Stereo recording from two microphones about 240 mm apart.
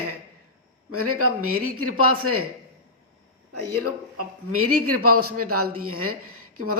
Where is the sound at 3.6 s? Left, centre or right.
Right.